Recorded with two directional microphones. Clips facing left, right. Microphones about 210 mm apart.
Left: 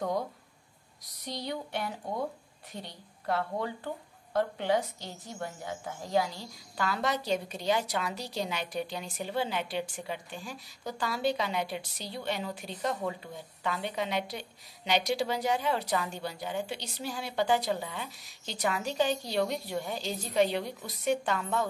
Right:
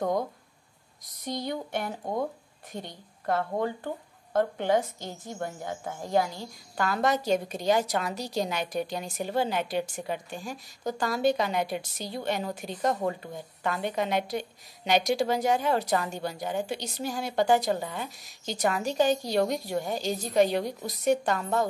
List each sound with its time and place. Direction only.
1.2 s a woman's voice: 50° right (ahead or behind)